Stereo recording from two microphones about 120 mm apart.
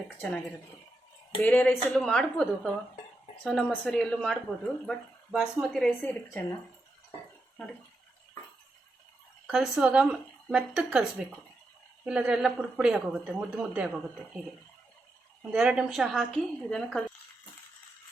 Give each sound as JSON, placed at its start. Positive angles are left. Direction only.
{"t": 0.2, "sound": "speech", "side_deg": 10}
{"t": 6.0, "sound": "a woman's voice", "side_deg": 20}
{"t": 9.5, "sound": "speech", "side_deg": -5}
{"t": 12.0, "sound": "a woman's voice", "side_deg": -5}
{"t": 15.5, "sound": "speech", "side_deg": -5}